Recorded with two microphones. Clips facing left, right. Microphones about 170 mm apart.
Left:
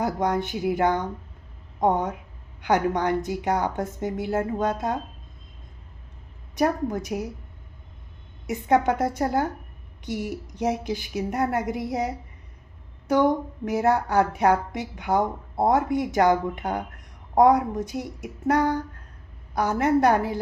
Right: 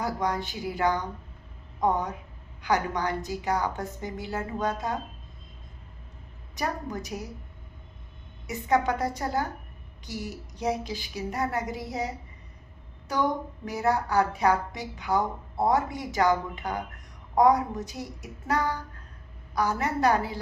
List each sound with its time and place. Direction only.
0.0 s a woman's voice: 50° left (ahead or behind)
2.6 s a woman's voice: 55° left (ahead or behind)
6.6 s a woman's voice: 55° left (ahead or behind)
8.4 s a woman's voice: 55° left (ahead or behind)
13.7 s a woman's voice: 55° left (ahead or behind)